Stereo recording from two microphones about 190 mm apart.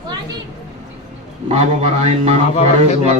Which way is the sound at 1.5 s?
35° right (ahead or behind).